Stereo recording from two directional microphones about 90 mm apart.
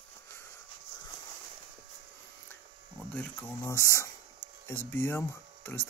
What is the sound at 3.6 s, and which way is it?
Speech, 35° left (ahead or behind).